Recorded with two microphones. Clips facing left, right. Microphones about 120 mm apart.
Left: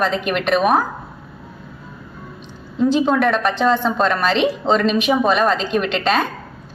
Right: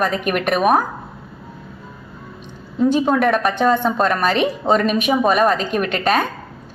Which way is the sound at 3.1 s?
Centre (ahead or behind).